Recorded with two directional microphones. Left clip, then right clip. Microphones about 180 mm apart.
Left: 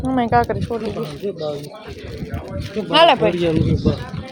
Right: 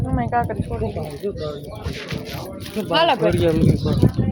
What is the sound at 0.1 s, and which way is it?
Speech, 70° left (ahead or behind).